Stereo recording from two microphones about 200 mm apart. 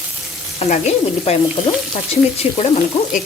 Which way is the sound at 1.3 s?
30° left (ahead or behind).